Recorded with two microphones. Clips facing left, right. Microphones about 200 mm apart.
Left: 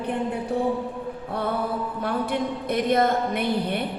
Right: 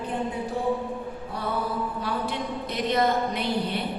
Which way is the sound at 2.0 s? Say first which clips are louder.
Left 4 dB; 55° left (ahead or behind).